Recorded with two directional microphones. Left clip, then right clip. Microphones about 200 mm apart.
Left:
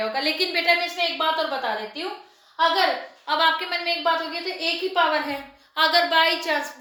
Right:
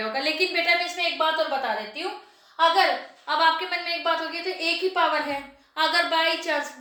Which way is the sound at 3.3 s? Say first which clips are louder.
Left 1 dB; 10° left (ahead or behind).